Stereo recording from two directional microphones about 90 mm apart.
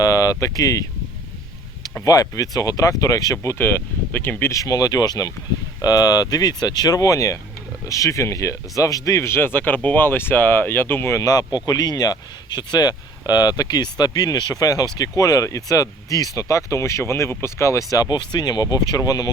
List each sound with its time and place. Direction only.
0.0 s speech: 40° left (ahead or behind)
2.0 s speech: 40° left (ahead or behind)
3.3 s speech: 30° left (ahead or behind)
4.5 s speech: 40° left (ahead or behind)